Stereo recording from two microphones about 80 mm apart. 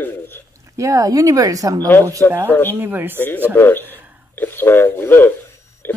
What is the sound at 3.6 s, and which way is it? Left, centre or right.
Speech, left.